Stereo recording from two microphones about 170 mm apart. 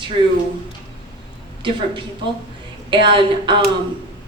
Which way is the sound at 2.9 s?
30° right (ahead or behind).